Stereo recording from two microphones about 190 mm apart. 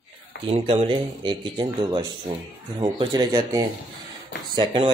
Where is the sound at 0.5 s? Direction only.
30° right (ahead or behind).